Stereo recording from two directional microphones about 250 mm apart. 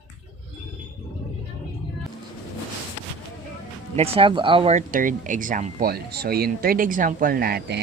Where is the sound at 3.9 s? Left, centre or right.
Right.